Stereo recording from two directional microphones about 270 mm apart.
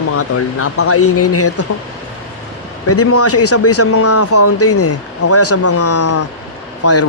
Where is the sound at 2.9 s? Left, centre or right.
Left.